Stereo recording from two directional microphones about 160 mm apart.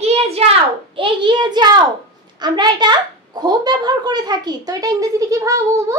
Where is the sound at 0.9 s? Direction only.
30° right (ahead or behind).